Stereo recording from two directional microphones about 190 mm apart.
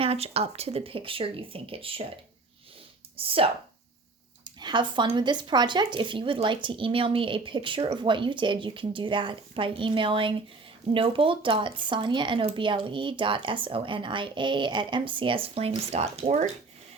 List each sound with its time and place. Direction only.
0.0 s speech: 30° right (ahead or behind)
3.2 s speech: 30° right (ahead or behind)